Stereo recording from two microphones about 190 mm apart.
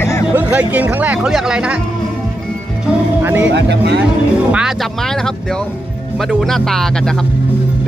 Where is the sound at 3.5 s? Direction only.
60° right (ahead or behind).